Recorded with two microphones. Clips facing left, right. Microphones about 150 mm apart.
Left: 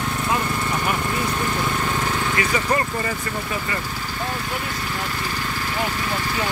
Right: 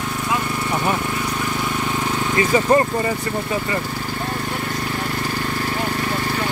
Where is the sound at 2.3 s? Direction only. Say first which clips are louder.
Right 9 dB; 30° right (ahead or behind).